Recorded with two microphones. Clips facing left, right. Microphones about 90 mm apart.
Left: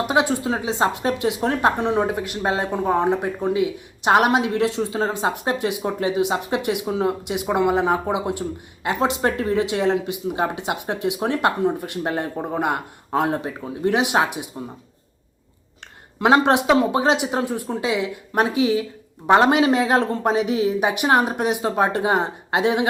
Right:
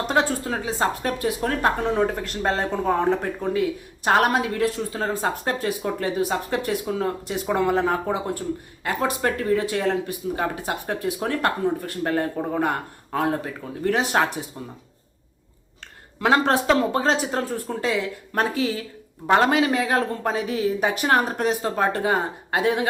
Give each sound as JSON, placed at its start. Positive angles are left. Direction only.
{"t": 0.1, "sound": "a woman's voice", "side_deg": 15}
{"t": 16.2, "sound": "a woman's voice", "side_deg": 20}